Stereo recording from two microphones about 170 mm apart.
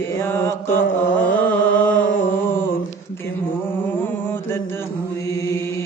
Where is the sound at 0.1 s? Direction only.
15° left (ahead or behind).